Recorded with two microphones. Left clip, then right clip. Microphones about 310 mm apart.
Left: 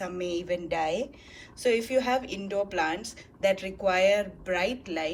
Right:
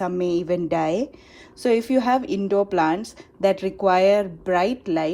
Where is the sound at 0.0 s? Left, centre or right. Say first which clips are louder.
Right 9 dB; centre.